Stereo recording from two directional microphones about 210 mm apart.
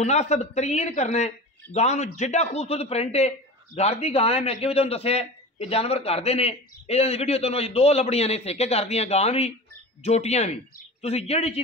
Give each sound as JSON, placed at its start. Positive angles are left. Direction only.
{"t": 0.0, "sound": "a man's voice", "side_deg": 35}